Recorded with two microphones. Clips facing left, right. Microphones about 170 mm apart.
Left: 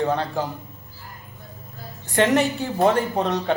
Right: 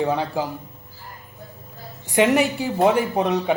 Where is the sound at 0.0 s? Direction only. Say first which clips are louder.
Right 1 dB; 10° right (ahead or behind).